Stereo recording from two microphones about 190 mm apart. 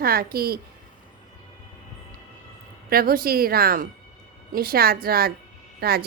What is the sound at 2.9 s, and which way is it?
A woman's voice, 50° right (ahead or behind).